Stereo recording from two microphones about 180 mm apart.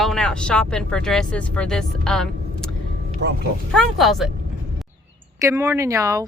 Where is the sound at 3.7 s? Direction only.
Centre (ahead or behind).